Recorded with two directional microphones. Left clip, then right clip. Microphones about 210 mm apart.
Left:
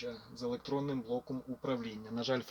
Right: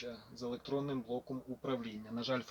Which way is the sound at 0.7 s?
5° left (ahead or behind).